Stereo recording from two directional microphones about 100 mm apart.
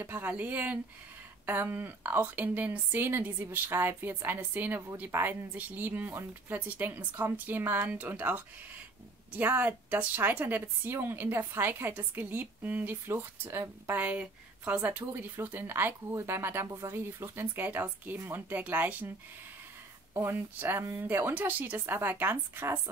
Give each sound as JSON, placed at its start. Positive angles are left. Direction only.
{"t": 0.0, "sound": "a woman's voice", "side_deg": -20}
{"t": 20.2, "sound": "a woman's voice", "side_deg": -25}